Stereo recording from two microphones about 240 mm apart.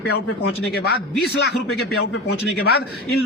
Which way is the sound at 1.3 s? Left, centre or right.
Left.